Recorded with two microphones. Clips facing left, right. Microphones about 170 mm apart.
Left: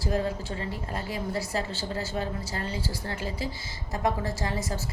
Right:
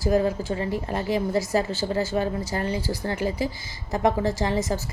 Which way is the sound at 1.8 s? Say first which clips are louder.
Right 7 dB; 40° right (ahead or behind).